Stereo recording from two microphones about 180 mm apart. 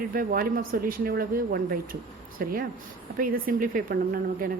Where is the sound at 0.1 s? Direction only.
55° right (ahead or behind).